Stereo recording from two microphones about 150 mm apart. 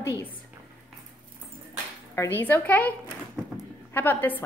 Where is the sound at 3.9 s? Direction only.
15° left (ahead or behind).